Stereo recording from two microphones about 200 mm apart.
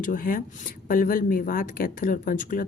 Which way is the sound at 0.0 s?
45° left (ahead or behind).